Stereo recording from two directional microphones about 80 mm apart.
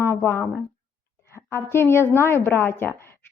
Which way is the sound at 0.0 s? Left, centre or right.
Left.